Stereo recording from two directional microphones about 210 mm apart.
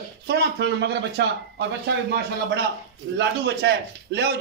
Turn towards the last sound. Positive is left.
turn(degrees=-50)  # may be behind; listen again after turning